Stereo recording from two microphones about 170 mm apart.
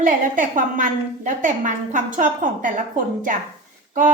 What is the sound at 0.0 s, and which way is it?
A woman's voice, 50° right (ahead or behind).